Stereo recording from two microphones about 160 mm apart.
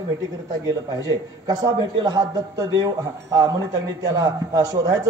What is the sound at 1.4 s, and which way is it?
Speech, 25° right (ahead or behind).